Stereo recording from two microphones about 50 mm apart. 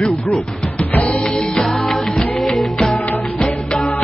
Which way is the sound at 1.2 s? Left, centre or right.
Centre.